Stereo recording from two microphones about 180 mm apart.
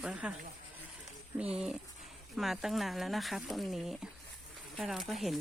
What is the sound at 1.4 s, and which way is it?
Speech, 5° right (ahead or behind).